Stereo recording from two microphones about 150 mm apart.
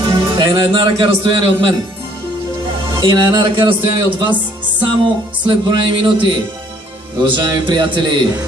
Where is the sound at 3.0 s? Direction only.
25° right (ahead or behind).